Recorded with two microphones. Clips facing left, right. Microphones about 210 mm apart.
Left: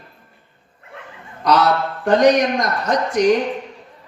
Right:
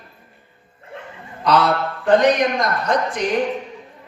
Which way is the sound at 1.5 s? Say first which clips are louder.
Left 1 dB; 55° right (ahead or behind).